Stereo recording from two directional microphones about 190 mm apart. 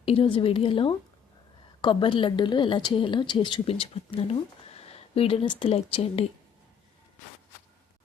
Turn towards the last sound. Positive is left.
turn(degrees=30)  # may be behind; listen again after turning